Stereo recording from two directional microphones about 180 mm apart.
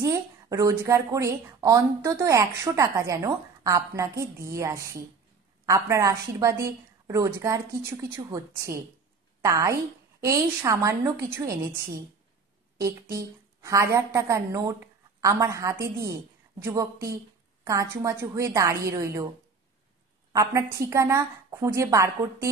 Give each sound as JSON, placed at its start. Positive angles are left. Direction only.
{"t": 0.0, "sound": "a woman's voice", "side_deg": -20}
{"t": 12.8, "sound": "a woman's voice", "side_deg": -15}
{"t": 20.3, "sound": "a woman's voice", "side_deg": -20}